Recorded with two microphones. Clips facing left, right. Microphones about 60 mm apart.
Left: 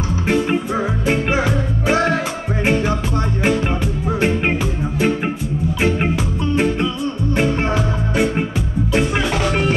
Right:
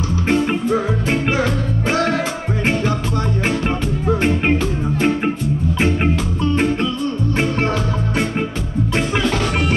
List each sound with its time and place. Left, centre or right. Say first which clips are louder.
0.3 s music: right 1 dB; centre
1.3 s music: even; centre
4.2 s music: left 2 dB; centre
6.5 s music: left 1 dB; centre
8.9 s music: left 1 dB; centre